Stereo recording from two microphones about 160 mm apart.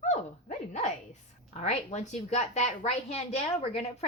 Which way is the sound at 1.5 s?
45° left (ahead or behind).